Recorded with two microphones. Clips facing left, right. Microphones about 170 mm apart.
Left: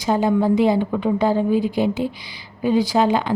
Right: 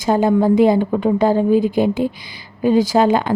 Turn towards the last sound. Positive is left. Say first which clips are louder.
# right 3 dB
turn(degrees=-50)  # may be behind; listen again after turning